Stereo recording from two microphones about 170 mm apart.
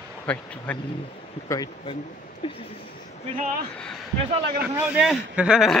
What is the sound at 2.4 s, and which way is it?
Speech, 30° left (ahead or behind).